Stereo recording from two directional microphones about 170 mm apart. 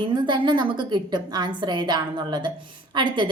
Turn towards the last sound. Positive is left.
turn(degrees=-30)  # may be behind; listen again after turning